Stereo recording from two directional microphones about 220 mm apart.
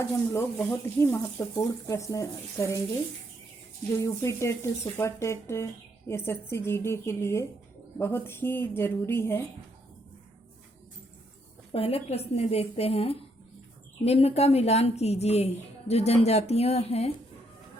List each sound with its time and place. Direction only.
0.0 s speech: 10° left (ahead or behind)
4.0 s speech: 15° left (ahead or behind)
11.7 s a woman's voice: 25° left (ahead or behind)